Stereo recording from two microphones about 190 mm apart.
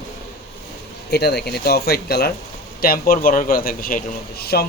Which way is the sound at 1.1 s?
60° left (ahead or behind).